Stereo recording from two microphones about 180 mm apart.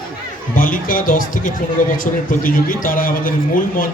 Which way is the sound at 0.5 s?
50° left (ahead or behind).